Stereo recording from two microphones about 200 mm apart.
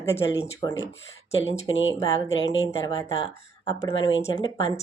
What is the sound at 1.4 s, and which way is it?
Speech, 70° left (ahead or behind).